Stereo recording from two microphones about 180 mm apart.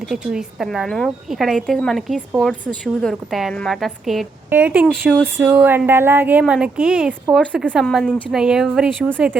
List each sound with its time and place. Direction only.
0.1 s a woman's voice: centre (ahead or behind)